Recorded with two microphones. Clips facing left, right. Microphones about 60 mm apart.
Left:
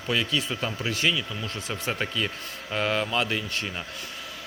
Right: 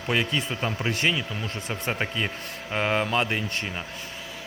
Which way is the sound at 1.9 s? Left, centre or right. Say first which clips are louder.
Right 1 dB; right.